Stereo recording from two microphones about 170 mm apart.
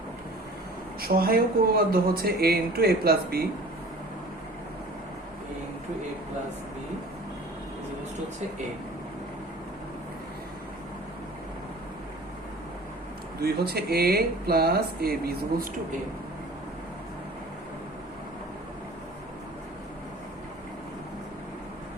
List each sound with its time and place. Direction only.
1.0 s speech: 60° right (ahead or behind)
13.4 s speech: 65° right (ahead or behind)